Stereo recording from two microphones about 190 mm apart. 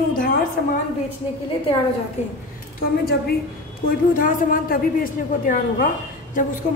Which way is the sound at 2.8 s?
55° left (ahead or behind).